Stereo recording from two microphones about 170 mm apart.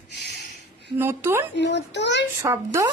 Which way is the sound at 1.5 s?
90° left.